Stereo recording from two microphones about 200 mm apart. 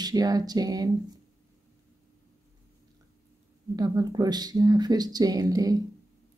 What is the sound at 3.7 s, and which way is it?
Speech, 20° right (ahead or behind).